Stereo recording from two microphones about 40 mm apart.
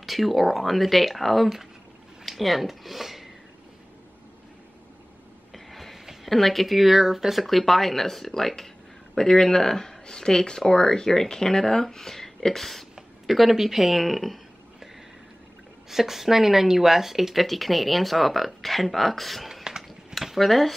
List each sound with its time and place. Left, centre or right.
0.0 s speech: centre
5.5 s a sound: centre
6.2 s speech: centre
13.3 s speech: centre
15.9 s speech: centre
19.5 s a sound: centre
20.2 s speech: centre